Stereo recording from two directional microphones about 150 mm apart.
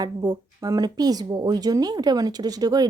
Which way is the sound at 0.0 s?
25° right (ahead or behind).